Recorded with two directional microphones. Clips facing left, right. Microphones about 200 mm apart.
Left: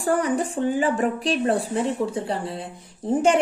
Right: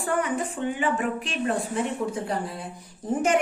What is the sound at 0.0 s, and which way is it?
A woman's voice, 35° left (ahead or behind).